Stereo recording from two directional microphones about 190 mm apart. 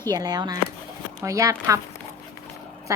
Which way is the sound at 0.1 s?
20° right (ahead or behind).